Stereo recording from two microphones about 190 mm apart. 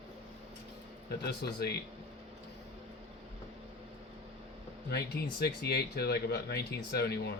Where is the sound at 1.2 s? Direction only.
60° left (ahead or behind).